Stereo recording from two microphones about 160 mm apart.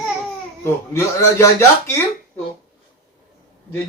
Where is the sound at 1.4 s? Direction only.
15° left (ahead or behind).